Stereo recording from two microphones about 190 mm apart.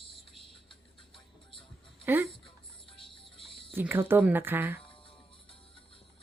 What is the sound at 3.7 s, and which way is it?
Speech, 10° right (ahead or behind).